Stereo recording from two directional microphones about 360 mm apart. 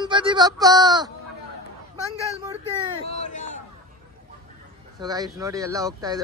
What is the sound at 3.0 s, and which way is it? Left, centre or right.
Speech, centre.